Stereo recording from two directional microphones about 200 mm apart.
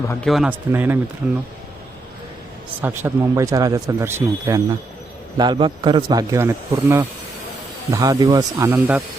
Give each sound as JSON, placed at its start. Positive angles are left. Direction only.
{"t": 0.1, "sound": "a man's voice", "side_deg": 5}
{"t": 2.8, "sound": "speech", "side_deg": -10}